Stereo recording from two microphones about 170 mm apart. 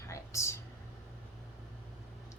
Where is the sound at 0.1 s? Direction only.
15° left (ahead or behind).